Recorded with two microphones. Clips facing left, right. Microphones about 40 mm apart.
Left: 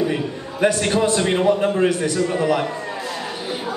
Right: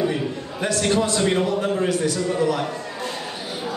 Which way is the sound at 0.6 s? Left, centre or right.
Left.